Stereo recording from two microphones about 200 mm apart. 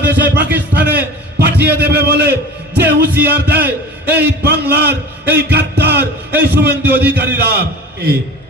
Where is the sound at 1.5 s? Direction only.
55° right (ahead or behind).